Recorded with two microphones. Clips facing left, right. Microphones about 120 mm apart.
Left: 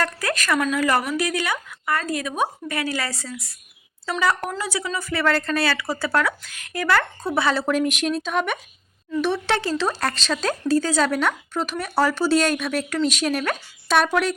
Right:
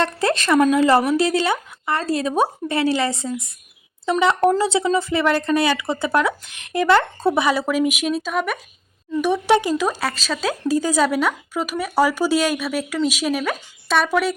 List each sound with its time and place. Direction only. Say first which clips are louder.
0.0 s speech: right 5 dB; 25° right (ahead or behind)
7.4 s speech: right 2 dB; 10° right (ahead or behind)
9.1 s speech: right 5 dB; 15° right (ahead or behind)